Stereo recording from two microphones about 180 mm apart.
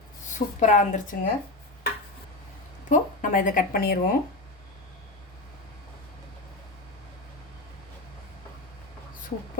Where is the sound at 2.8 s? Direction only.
45° left (ahead or behind).